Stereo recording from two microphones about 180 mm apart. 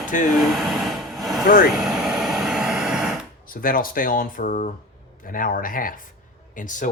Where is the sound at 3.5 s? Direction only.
50° left (ahead or behind).